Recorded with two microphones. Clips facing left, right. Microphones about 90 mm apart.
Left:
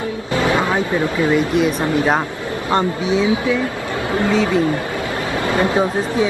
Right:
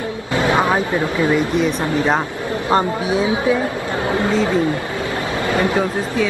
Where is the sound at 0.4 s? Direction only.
25° right (ahead or behind).